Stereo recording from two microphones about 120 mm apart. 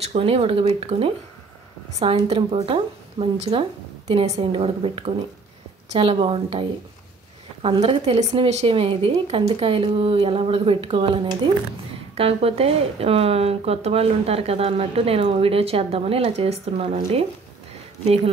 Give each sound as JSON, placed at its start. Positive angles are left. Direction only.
{"t": 0.0, "sound": "speech", "side_deg": -55}
{"t": 7.6, "sound": "speech", "side_deg": -50}